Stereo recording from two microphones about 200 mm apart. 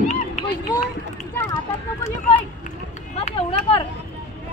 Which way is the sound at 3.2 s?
30° left (ahead or behind).